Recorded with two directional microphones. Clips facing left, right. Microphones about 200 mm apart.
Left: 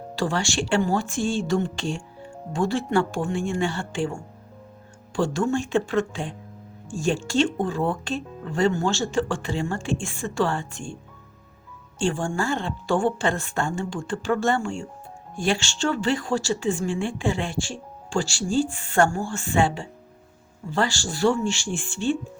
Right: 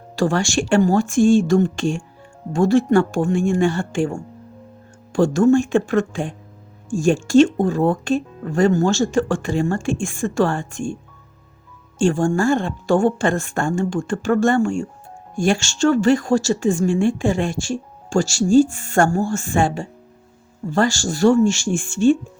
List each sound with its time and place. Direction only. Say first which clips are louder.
0.2 s speech: right 6 dB; 45° right (ahead or behind)
11.9 s speech: right 7 dB; 45° right (ahead or behind)